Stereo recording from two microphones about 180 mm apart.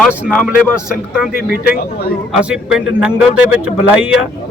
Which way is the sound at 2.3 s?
5° right (ahead or behind).